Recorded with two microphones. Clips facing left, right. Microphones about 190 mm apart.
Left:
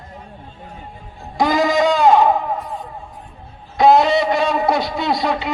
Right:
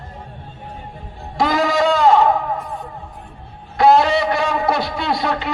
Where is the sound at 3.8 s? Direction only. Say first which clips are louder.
Left 1 dB; 15° left (ahead or behind).